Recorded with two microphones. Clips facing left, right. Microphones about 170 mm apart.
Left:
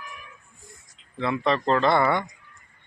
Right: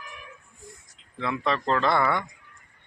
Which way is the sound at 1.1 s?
Centre (ahead or behind).